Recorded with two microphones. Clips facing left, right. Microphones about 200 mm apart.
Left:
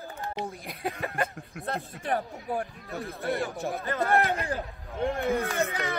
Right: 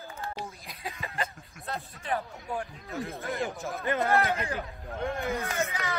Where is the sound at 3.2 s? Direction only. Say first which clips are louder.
Left 6 dB; 35° left (ahead or behind).